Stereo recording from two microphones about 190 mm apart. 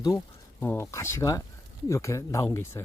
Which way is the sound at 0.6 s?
15° left (ahead or behind).